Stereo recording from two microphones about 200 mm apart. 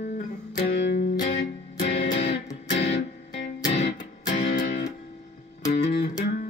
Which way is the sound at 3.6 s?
35° left (ahead or behind).